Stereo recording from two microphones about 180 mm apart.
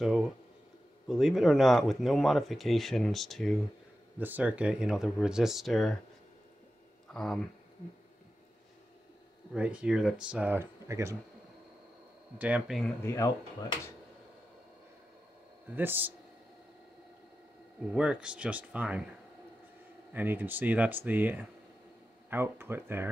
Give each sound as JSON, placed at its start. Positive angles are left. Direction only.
{"t": 0.0, "sound": "speech", "side_deg": 0}
{"t": 4.2, "sound": "speech", "side_deg": -10}
{"t": 7.1, "sound": "speech", "side_deg": 0}
{"t": 9.5, "sound": "speech", "side_deg": -5}
{"t": 12.4, "sound": "speech", "side_deg": -5}
{"t": 13.0, "sound": "speech", "side_deg": 15}
{"t": 15.7, "sound": "speech", "side_deg": -10}
{"t": 17.9, "sound": "speech", "side_deg": -5}
{"t": 20.1, "sound": "speech", "side_deg": -10}